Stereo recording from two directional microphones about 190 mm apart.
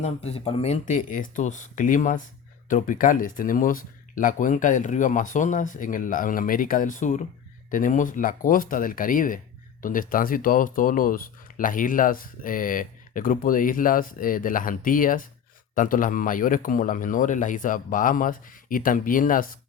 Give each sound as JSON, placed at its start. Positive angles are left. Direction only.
{"t": 0.0, "sound": "speech", "side_deg": 30}